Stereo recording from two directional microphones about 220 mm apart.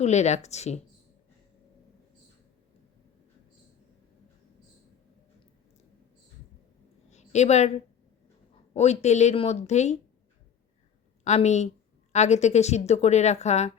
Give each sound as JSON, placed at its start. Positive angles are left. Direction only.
{"t": 0.0, "sound": "a woman's voice", "side_deg": 30}
{"t": 7.1, "sound": "a sound", "side_deg": 30}
{"t": 8.7, "sound": "a woman's voice", "side_deg": 30}
{"t": 11.2, "sound": "a woman's voice", "side_deg": 30}